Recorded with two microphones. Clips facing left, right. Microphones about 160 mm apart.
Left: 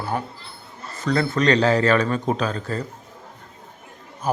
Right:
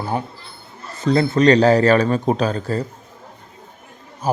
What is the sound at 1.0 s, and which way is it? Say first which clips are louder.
Speech: right 5 dB; 25° right (ahead or behind).